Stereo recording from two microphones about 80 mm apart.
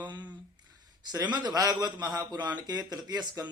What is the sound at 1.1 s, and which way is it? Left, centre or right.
Speech, right.